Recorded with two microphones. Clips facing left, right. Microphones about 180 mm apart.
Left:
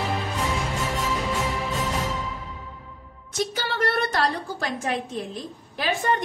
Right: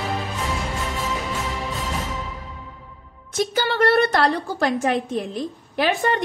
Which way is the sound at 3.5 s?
65° right (ahead or behind).